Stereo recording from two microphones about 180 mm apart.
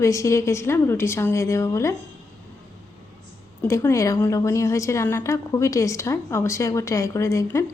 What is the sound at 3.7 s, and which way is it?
A woman's voice, 15° left (ahead or behind).